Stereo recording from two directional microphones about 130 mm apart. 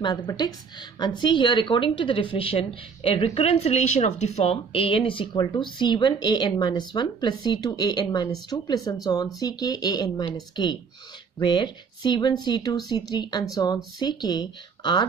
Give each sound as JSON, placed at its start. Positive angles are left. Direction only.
{"t": 0.0, "sound": "a woman's voice", "side_deg": 30}